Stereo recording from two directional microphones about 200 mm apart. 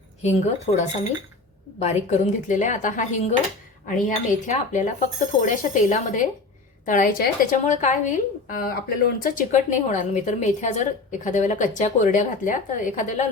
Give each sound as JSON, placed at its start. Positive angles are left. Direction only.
{"t": 0.2, "sound": "a woman's voice", "side_deg": 35}
{"t": 1.8, "sound": "a woman's voice", "side_deg": 35}